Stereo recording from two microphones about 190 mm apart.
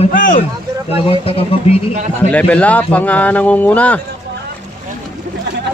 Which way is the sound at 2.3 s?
5° left (ahead or behind).